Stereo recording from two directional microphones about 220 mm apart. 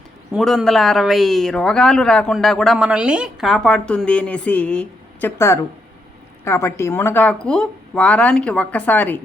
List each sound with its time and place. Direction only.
0.3 s speech: centre (ahead or behind)